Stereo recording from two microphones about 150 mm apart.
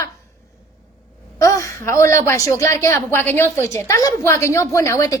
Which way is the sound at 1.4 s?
20° left (ahead or behind).